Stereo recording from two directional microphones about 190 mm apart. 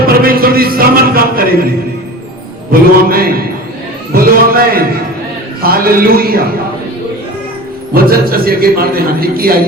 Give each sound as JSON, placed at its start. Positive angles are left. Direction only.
{"t": 0.2, "sound": "music", "side_deg": -50}
{"t": 2.7, "sound": "a man's voice", "side_deg": -50}
{"t": 4.1, "sound": "a sound", "side_deg": -50}
{"t": 5.6, "sound": "a man's voice", "side_deg": -50}
{"t": 7.9, "sound": "a man's voice", "side_deg": -50}